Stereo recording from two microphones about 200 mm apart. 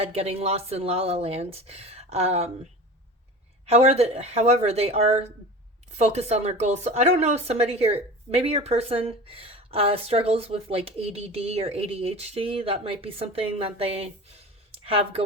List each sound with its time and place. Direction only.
0.0 s speech: 30° right (ahead or behind)
3.7 s speech: 30° right (ahead or behind)